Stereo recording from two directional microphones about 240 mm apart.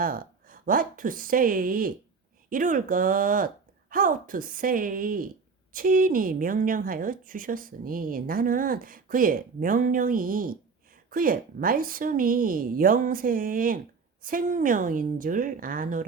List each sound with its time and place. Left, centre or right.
0.0 s a woman's voice: right